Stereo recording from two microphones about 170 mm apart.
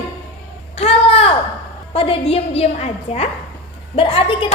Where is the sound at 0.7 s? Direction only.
35° left (ahead or behind).